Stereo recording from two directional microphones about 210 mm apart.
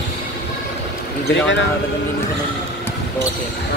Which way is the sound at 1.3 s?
60° left (ahead or behind).